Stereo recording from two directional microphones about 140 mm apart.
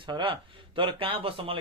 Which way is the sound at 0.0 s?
35° right (ahead or behind).